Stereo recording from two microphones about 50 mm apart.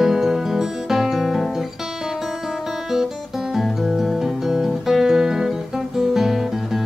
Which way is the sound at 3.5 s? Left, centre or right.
Centre.